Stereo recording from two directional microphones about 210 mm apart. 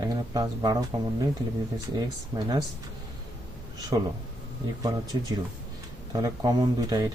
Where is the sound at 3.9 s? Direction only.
20° right (ahead or behind).